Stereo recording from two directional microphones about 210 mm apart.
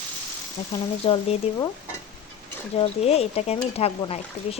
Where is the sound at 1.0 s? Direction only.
25° left (ahead or behind).